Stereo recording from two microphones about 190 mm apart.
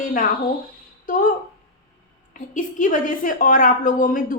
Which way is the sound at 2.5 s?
45° left (ahead or behind).